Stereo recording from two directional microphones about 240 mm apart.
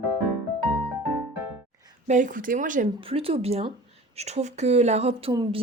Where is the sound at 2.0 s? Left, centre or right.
Right.